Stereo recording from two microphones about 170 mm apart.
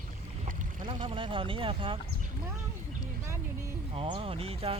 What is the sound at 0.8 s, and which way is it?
Boat, 30° right (ahead or behind).